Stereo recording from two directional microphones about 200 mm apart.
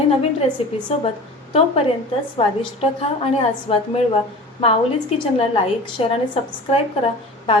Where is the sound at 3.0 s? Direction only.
30° left (ahead or behind).